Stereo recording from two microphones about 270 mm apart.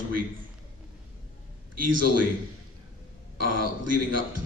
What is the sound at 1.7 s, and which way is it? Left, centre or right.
Speech, right.